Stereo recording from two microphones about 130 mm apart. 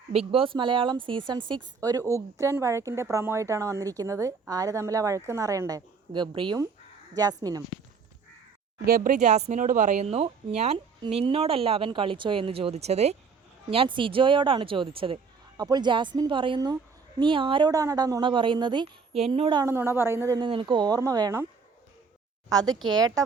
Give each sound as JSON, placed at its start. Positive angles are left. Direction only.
{"t": 0.1, "sound": "a woman's voice", "side_deg": -50}
{"t": 1.8, "sound": "speech", "side_deg": -25}
{"t": 7.4, "sound": "speech", "side_deg": -25}
{"t": 9.0, "sound": "speech", "side_deg": -80}
{"t": 13.7, "sound": "speech", "side_deg": -45}
{"t": 15.5, "sound": "a woman's voice", "side_deg": -30}
{"t": 17.7, "sound": "a woman's voice", "side_deg": -25}
{"t": 19.6, "sound": "speech", "side_deg": -20}
{"t": 20.4, "sound": "a woman's voice", "side_deg": -40}
{"t": 22.4, "sound": "a woman's voice", "side_deg": -30}